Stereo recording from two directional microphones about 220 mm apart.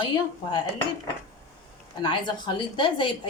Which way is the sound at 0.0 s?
20° left (ahead or behind).